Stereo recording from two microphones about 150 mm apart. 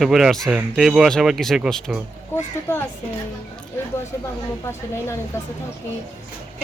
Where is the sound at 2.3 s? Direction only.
15° left (ahead or behind).